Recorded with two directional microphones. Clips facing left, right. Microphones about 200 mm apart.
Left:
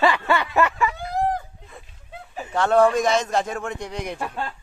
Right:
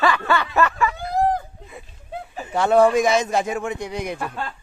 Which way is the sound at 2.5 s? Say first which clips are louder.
Right 2 dB; 10° right (ahead or behind).